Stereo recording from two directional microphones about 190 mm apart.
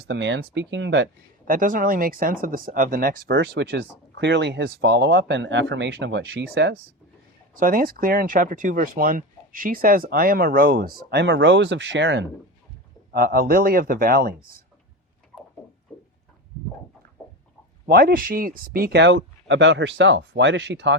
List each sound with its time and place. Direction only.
0.1 s speech: 65° right (ahead or behind)
1.5 s speech: 45° right (ahead or behind)
3.2 s speech: 70° right (ahead or behind)
7.5 s speech: 45° right (ahead or behind); by 12.2 s 75° right (ahead or behind)
13.1 s speech: 50° right (ahead or behind)
17.8 s speech: 50° right (ahead or behind)